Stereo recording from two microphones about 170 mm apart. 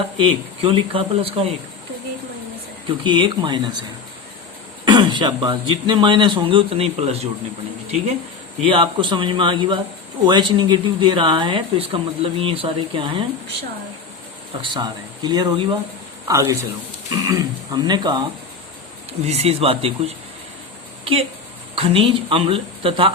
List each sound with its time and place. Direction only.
0.2 s speech: 30° right (ahead or behind)
3.0 s speech: 30° right (ahead or behind)
4.9 s speech: 25° right (ahead or behind)
8.6 s speech: 30° right (ahead or behind)
14.6 s a man's voice: 25° right (ahead or behind)
19.2 s speech: 35° right (ahead or behind)